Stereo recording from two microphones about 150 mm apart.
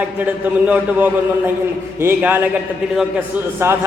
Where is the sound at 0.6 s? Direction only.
10° right (ahead or behind).